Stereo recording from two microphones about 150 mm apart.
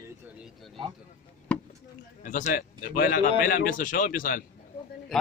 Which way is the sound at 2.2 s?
60° left (ahead or behind).